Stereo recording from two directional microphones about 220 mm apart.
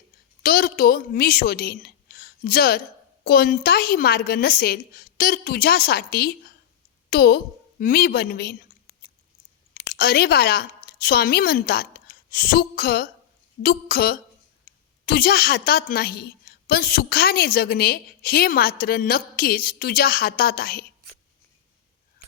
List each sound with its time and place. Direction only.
0.4 s a woman's voice: 40° left (ahead or behind)
9.9 s a woman's voice: 45° left (ahead or behind)